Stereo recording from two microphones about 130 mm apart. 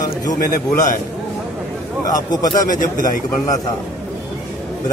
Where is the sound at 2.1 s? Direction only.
30° left (ahead or behind).